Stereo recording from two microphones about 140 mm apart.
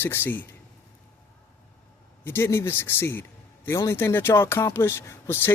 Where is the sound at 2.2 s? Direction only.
15° left (ahead or behind).